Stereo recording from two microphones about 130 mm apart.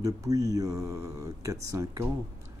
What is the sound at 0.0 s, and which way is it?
Speech, 25° right (ahead or behind).